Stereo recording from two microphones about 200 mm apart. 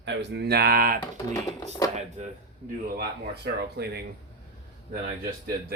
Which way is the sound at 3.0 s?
55° right (ahead or behind).